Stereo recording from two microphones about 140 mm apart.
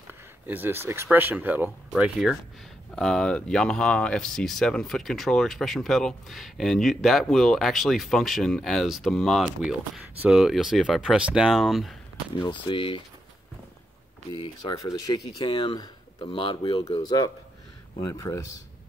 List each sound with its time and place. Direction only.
0.5 s speech: 15° right (ahead or behind)
3.0 s speech: 5° left (ahead or behind)
12.4 s speech: 40° left (ahead or behind)
14.7 s speech: 25° left (ahead or behind)
16.9 s speech: 30° left (ahead or behind)